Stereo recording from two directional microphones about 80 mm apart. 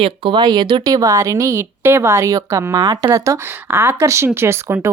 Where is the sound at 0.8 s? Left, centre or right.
Right.